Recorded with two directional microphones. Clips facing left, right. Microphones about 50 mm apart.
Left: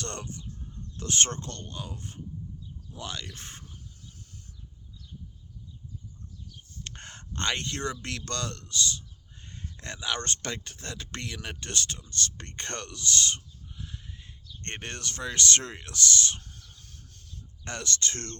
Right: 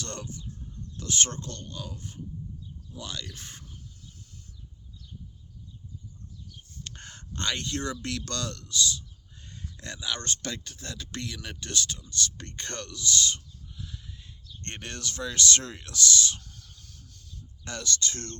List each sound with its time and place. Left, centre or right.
0.0 s speech: left
6.8 s fowl: left
8.0 s speech: left
16.7 s a sound: left